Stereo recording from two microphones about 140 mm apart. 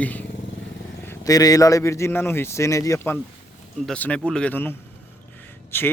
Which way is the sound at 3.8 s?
10° left (ahead or behind).